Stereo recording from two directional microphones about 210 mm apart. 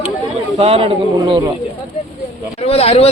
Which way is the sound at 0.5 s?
30° right (ahead or behind).